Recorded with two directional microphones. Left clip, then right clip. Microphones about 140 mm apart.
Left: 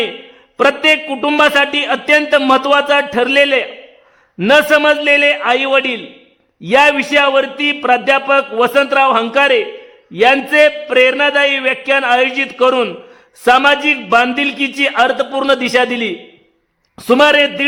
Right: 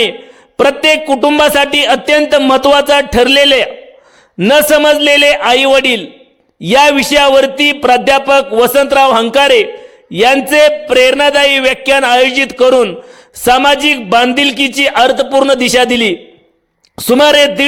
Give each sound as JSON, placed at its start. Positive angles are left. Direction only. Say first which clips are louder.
{"t": 0.5, "sound": "a man's voice", "louder": "right 2 dB", "side_deg": -35}